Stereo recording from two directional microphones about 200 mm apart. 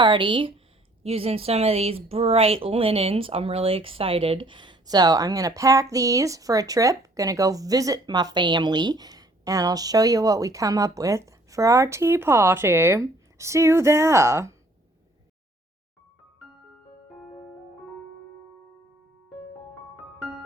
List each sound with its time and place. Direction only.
0.0 s a woman's voice: 25° right (ahead or behind)